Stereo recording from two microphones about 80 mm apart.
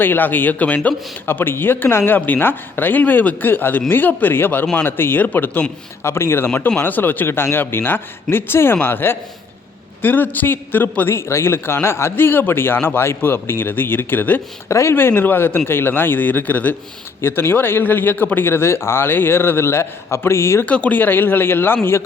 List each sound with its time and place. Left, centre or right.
0.0 s a man's voice: left
6.0 s a man's voice: left
14.7 s a man's voice: left
17.2 s a man's voice: left
20.7 s a man's voice: centre